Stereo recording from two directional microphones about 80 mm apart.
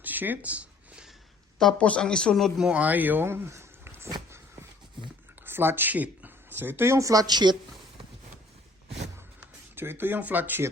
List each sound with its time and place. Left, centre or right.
0.0 s a sound: right
1.5 s speech: centre
2.6 s speech: centre
5.5 s speech: right
9.7 s speech: right